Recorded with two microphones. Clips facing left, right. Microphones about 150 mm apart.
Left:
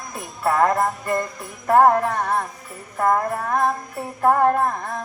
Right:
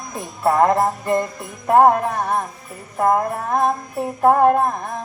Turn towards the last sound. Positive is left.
turn(degrees=-15)  # may be behind; listen again after turning